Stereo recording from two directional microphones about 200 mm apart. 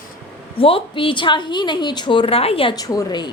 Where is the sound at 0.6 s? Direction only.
25° left (ahead or behind).